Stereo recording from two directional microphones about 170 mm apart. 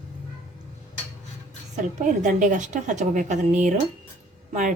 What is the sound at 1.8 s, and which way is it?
A woman's voice, 45° right (ahead or behind).